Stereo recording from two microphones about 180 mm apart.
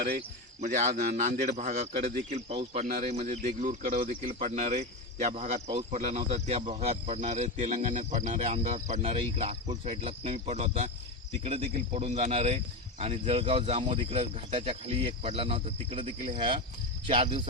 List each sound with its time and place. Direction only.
0.6 s a man's voice: 40° right (ahead or behind); by 17.4 s 25° right (ahead or behind)